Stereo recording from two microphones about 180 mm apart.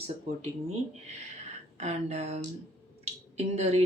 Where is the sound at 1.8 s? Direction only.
40° right (ahead or behind).